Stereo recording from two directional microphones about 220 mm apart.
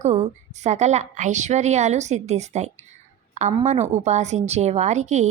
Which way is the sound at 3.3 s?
30° right (ahead or behind).